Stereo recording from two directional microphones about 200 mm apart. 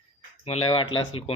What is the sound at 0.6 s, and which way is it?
Speech, 25° left (ahead or behind).